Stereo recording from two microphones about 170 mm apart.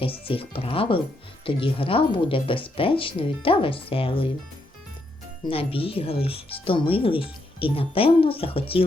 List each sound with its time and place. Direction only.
0.3 s speech: 35° left (ahead or behind)
5.5 s speech: 35° left (ahead or behind)